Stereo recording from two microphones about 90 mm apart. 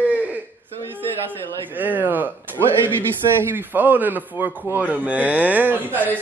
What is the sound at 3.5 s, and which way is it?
Speech, 20° right (ahead or behind).